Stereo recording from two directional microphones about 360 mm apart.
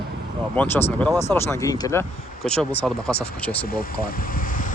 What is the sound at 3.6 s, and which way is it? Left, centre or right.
Speech, left.